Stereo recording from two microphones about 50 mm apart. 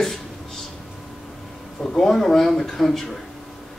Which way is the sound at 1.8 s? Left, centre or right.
Centre.